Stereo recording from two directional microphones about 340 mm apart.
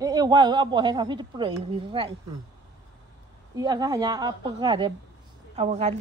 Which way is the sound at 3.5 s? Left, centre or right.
Centre.